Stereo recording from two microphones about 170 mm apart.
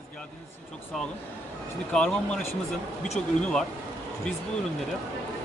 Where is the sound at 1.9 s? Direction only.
5° left (ahead or behind).